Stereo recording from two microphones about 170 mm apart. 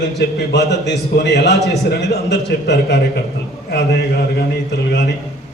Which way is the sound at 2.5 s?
90° left.